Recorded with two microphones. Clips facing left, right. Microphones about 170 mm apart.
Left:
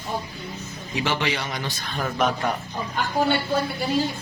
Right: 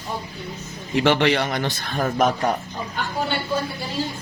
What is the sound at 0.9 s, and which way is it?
A man's voice, 60° right (ahead or behind).